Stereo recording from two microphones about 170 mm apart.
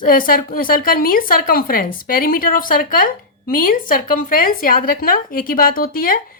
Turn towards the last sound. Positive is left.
turn(degrees=55)  # may be behind; listen again after turning